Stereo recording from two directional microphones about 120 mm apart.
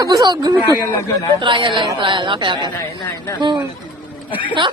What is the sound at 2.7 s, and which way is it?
Speech, 25° left (ahead or behind).